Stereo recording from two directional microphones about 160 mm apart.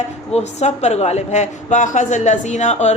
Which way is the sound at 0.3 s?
45° left (ahead or behind).